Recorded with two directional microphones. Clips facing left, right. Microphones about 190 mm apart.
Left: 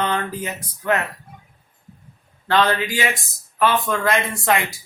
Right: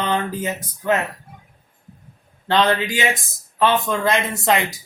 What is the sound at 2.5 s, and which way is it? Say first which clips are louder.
Speech: right 1 dB; 25° right (ahead or behind).